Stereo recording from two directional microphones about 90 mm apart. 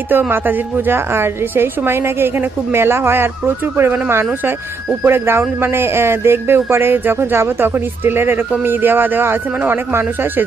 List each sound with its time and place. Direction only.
0.1 s speech: 20° right (ahead or behind)